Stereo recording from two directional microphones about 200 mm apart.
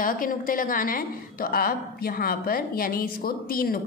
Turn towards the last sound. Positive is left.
turn(degrees=45)  # may be behind; listen again after turning